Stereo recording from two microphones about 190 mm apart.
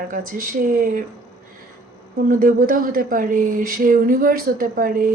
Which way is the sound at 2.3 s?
45° right (ahead or behind).